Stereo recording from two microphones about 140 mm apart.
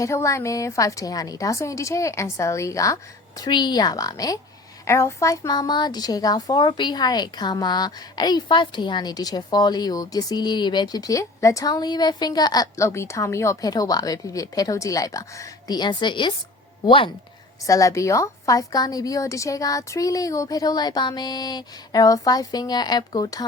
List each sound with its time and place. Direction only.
0.0 s a woman's voice: 20° left (ahead or behind); by 17.1 s 40° left (ahead or behind)
17.7 s a woman's voice: 25° left (ahead or behind)